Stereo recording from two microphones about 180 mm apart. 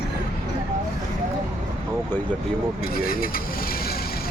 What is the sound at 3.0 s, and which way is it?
Speech, 55° left (ahead or behind).